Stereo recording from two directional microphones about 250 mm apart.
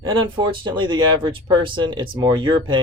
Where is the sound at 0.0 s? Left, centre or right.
Centre.